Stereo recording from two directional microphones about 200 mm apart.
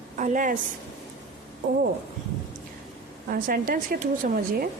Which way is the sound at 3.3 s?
45° right (ahead or behind).